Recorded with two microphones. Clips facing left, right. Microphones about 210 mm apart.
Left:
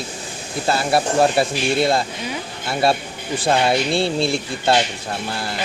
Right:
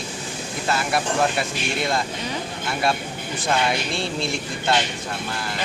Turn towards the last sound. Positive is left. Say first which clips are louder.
# left 5 dB
turn(degrees=35)  # may be behind; listen again after turning